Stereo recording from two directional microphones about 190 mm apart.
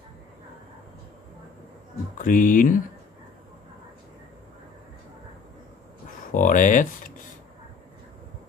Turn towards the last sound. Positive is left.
turn(degrees=45)  # may be behind; listen again after turning